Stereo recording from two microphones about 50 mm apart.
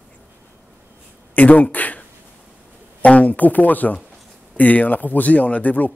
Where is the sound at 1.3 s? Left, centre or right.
Left.